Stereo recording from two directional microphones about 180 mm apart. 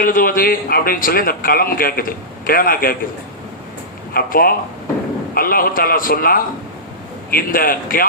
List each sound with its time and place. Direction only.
0.0 s a man's voice: 50° left (ahead or behind)
4.1 s a man's voice: 55° left (ahead or behind)